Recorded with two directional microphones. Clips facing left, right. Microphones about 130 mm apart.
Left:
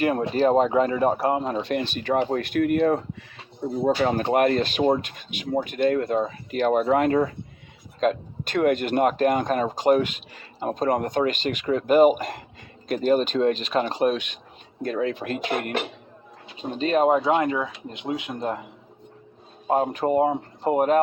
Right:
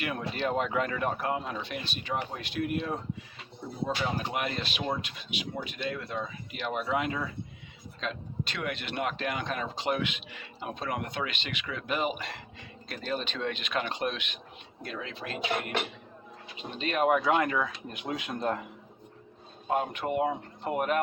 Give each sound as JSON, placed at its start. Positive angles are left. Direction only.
{"t": 0.0, "sound": "speech", "side_deg": 40}
{"t": 1.7, "sound": "speech", "side_deg": 55}
{"t": 16.7, "sound": "speech", "side_deg": 35}
{"t": 19.6, "sound": "speech", "side_deg": 35}